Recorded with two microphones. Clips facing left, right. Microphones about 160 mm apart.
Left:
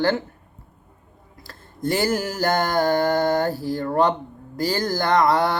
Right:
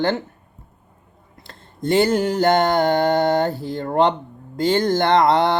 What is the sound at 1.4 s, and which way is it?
Speech, 25° right (ahead or behind).